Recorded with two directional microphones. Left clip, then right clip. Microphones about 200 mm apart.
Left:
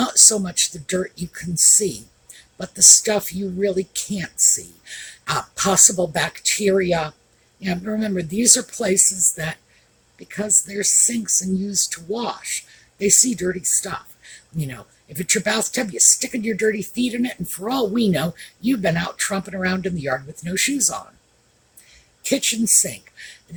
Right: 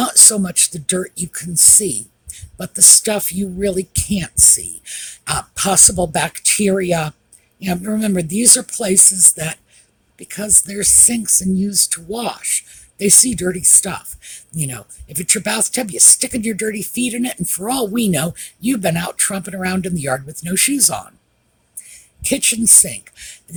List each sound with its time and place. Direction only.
0.0 s speech: 45° right (ahead or behind)
2.6 s speech: 45° right (ahead or behind)
22.2 s speech: 45° right (ahead or behind)